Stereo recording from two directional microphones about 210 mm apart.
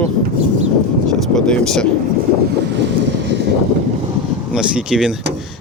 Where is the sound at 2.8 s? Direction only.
55° right (ahead or behind).